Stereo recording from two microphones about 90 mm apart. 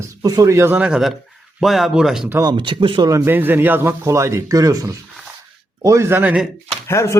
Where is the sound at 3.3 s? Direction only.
20° right (ahead or behind).